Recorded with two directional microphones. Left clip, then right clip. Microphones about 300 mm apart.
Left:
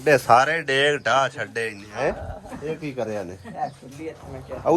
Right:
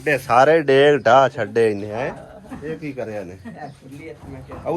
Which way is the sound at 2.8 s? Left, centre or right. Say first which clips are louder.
Left 1 dB; centre.